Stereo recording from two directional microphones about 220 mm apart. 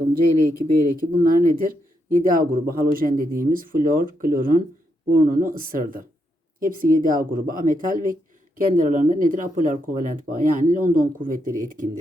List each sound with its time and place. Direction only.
0.9 s speech: 40° right (ahead or behind)